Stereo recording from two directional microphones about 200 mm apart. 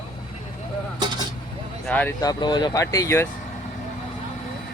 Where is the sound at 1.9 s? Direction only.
5° left (ahead or behind).